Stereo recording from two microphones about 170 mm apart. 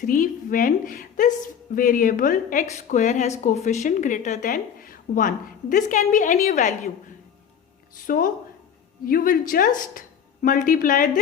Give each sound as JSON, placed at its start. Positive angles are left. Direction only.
{"t": 0.0, "sound": "speech", "side_deg": 55}
{"t": 8.0, "sound": "speech", "side_deg": 55}